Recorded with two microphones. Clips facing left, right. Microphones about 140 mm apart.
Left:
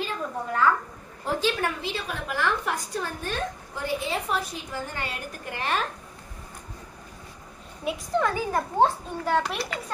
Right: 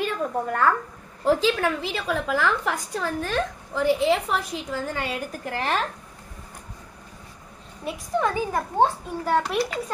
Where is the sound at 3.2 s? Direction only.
90° right.